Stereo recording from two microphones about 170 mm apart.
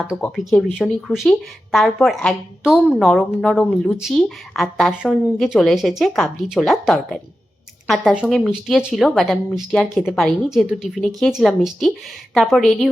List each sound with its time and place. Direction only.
0.0 s speech: centre (ahead or behind)